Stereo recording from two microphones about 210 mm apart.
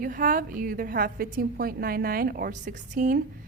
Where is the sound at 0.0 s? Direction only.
40° right (ahead or behind).